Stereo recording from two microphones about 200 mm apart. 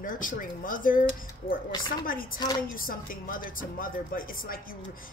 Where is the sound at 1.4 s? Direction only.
30° left (ahead or behind).